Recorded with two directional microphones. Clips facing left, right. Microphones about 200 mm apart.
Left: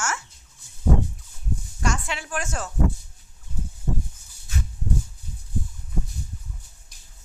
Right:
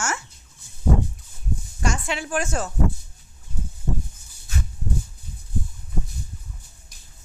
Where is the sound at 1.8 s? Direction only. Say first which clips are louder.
Right 2 dB; centre (ahead or behind).